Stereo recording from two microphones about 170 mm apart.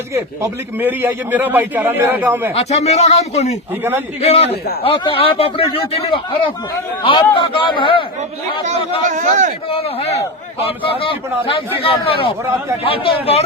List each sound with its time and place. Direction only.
0.1 s a man's voice: 15° right (ahead or behind)
2.6 s a man's voice: 40° left (ahead or behind)
9.0 s speech: 45° right (ahead or behind)
9.6 s a man's voice: 35° left (ahead or behind)